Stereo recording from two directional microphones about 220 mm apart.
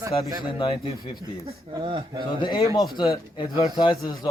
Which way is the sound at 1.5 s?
25° right (ahead or behind).